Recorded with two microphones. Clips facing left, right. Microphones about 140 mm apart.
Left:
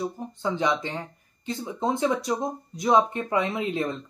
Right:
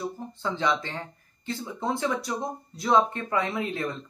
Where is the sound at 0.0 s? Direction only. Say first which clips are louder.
Left 3 dB; 20° left (ahead or behind).